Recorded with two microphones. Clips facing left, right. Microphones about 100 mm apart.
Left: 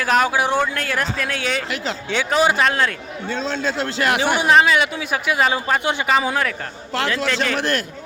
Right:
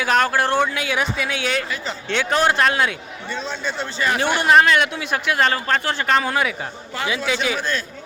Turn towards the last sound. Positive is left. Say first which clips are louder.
# left 1 dB
turn(degrees=-5)  # may be behind; listen again after turning